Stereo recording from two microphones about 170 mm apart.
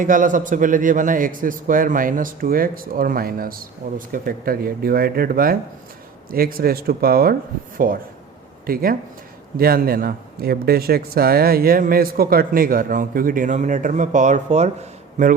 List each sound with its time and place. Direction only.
0.0 s a man's voice: 50° right (ahead or behind)